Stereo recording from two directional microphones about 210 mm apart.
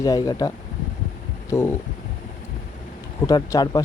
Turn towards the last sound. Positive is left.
turn(degrees=15)  # may be behind; listen again after turning